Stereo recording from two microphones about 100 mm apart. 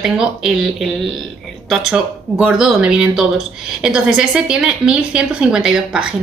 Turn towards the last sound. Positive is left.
turn(degrees=-5)  # may be behind; listen again after turning